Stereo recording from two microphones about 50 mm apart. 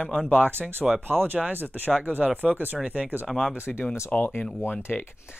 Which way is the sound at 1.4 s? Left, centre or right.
Right.